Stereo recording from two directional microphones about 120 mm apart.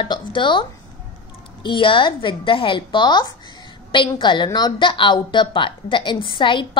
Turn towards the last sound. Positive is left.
turn(degrees=45)  # may be behind; listen again after turning